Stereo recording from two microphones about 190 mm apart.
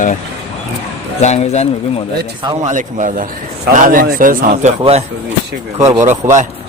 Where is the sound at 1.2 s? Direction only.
35° left (ahead or behind).